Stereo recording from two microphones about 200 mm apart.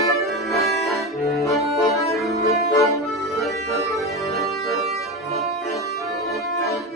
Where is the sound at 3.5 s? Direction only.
15° left (ahead or behind).